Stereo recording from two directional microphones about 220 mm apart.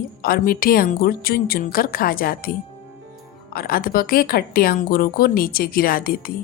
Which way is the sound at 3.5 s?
40° left (ahead or behind).